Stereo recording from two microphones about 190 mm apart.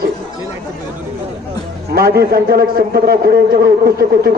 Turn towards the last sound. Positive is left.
turn(degrees=-50)  # may be behind; listen again after turning